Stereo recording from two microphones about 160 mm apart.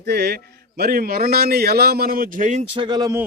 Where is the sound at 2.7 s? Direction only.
30° right (ahead or behind).